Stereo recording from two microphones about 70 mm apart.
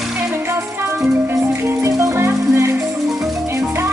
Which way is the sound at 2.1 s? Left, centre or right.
Right.